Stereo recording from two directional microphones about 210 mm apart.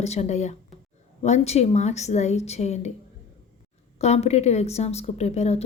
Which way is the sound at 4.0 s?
30° left (ahead or behind).